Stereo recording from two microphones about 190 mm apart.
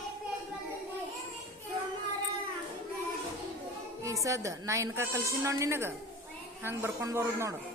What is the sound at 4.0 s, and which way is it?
A woman's voice, 15° right (ahead or behind).